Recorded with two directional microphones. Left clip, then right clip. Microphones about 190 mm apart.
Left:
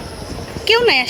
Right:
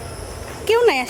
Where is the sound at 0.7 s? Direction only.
5° right (ahead or behind).